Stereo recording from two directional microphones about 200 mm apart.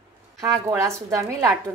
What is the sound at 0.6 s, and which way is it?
Speech, 15° right (ahead or behind).